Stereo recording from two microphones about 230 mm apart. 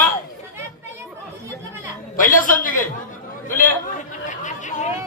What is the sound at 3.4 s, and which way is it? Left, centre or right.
Chatter, left.